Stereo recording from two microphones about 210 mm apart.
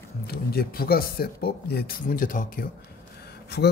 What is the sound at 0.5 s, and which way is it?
Speech, 45° left (ahead or behind).